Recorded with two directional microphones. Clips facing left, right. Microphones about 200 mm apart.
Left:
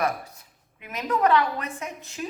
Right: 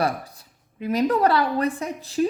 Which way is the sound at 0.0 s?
35° right (ahead or behind).